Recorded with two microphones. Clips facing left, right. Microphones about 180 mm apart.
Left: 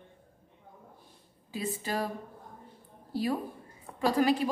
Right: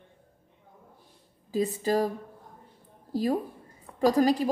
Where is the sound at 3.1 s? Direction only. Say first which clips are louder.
Right 4 dB; 40° right (ahead or behind).